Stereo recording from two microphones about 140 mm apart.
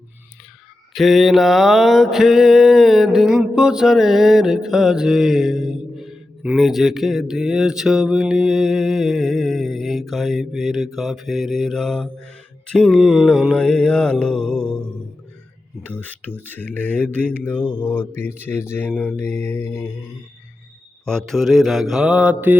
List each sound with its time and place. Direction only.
0.9 s mantra: centre (ahead or behind)
14.4 s speech: 5° left (ahead or behind)
21.0 s mantra: 5° left (ahead or behind); by 22.5 s 10° right (ahead or behind)